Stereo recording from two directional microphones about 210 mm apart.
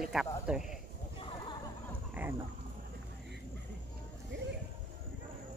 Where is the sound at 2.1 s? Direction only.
10° right (ahead or behind).